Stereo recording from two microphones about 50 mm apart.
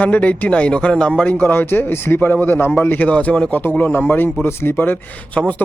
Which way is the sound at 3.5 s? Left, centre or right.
Left.